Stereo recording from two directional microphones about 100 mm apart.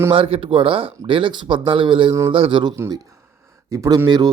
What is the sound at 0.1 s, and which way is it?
Speech, 65° right (ahead or behind).